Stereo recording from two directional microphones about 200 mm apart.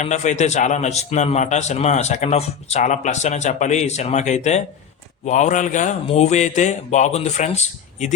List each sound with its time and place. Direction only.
0.0 s a man's voice: 35° left (ahead or behind)